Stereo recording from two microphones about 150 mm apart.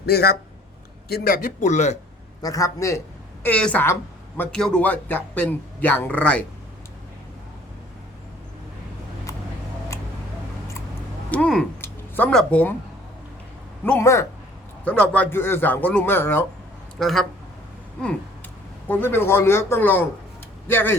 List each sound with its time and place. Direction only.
0.0 s speech: 90° left; by 2.0 s 50° left (ahead or behind)
2.4 s a man's voice: 25° left (ahead or behind)
3.4 s speech: 10° left (ahead or behind)
11.3 s a sound: 5° left (ahead or behind)
13.8 s speech: 10° left (ahead or behind)
17.0 s speech: centre (ahead or behind)
18.9 s speech: 15° left (ahead or behind)